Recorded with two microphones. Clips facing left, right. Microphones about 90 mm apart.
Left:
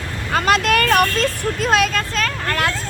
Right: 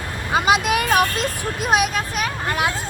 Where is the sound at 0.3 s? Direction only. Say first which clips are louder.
Left 1 dB; 10° right (ahead or behind).